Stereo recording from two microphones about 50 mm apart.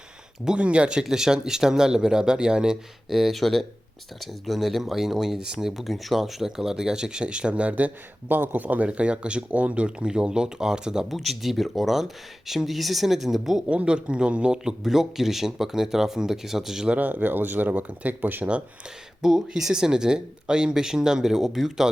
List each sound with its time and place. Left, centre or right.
0.4 s speech: right
3.1 s speech: centre
11.2 s speech: centre
13.7 s speech: right
16.9 s speech: right
19.2 s speech: centre